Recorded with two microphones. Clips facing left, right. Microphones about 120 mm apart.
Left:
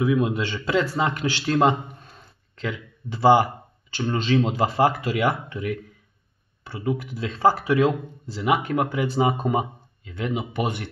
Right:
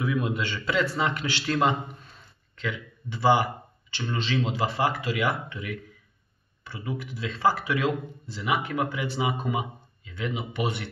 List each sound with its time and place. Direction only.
0.0 s speech: 25° left (ahead or behind)
7.0 s speech: 45° left (ahead or behind)